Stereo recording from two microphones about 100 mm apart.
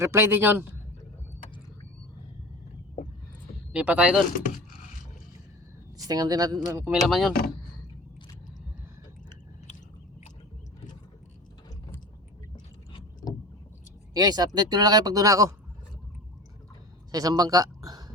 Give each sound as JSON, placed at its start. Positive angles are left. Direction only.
{"t": 0.0, "sound": "a man's voice", "side_deg": -25}
{"t": 3.7, "sound": "speech", "side_deg": -10}
{"t": 6.0, "sound": "speech", "side_deg": -40}
{"t": 6.9, "sound": "speech", "side_deg": 0}
{"t": 14.1, "sound": "speech", "side_deg": -40}
{"t": 17.1, "sound": "speech", "side_deg": -35}